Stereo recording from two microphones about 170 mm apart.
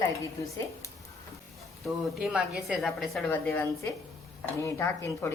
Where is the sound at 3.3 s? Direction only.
10° left (ahead or behind).